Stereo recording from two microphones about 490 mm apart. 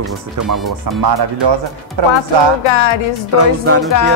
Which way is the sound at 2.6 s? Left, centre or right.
Left.